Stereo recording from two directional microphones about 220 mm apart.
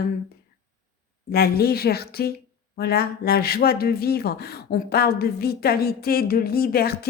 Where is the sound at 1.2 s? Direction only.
45° left (ahead or behind).